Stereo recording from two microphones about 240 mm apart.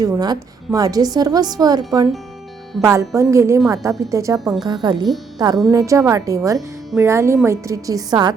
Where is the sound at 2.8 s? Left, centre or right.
Centre.